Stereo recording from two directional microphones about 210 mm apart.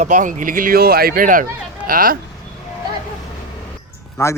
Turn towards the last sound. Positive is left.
turn(degrees=15)  # may be behind; listen again after turning